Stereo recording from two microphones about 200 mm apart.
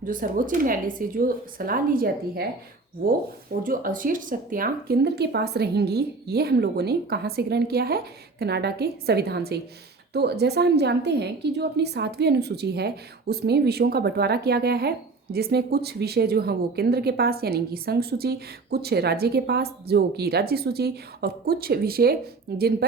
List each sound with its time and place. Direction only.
0.0 s a woman's voice: 40° right (ahead or behind)
3.6 s a woman's voice: 45° right (ahead or behind)